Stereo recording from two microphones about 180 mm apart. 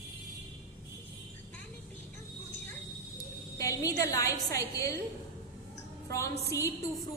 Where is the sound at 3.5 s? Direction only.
20° left (ahead or behind).